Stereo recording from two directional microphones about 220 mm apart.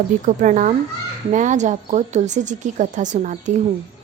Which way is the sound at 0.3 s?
35° right (ahead or behind).